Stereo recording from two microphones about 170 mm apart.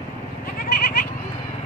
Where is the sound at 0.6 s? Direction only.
60° left (ahead or behind).